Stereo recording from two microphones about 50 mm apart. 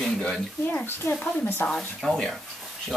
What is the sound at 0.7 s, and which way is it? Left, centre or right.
Speech, left.